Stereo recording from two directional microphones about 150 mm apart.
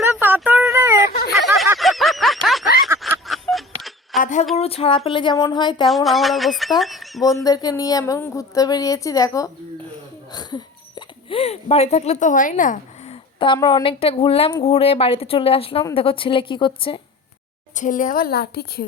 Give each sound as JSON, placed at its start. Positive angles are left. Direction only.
{"t": 0.0, "sound": "a sound", "side_deg": -10}
{"t": 1.8, "sound": "snicker", "side_deg": 0}
{"t": 3.0, "sound": "a sound", "side_deg": 0}
{"t": 4.2, "sound": "a sound", "side_deg": 55}
{"t": 4.5, "sound": "speech", "side_deg": 40}
{"t": 5.8, "sound": "speech", "side_deg": 0}
{"t": 7.4, "sound": "a woman's voice", "side_deg": 25}
{"t": 10.3, "sound": "hiccup", "side_deg": 30}
{"t": 13.6, "sound": "a woman's voice", "side_deg": 25}
{"t": 13.8, "sound": "speech", "side_deg": 40}
{"t": 17.7, "sound": "a woman's voice", "side_deg": 60}